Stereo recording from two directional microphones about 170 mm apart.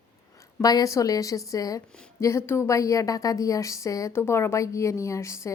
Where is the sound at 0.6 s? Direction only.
20° left (ahead or behind).